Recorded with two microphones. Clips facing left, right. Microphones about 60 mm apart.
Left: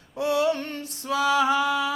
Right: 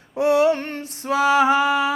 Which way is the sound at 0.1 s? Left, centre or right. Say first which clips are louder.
Right 6 dB; right.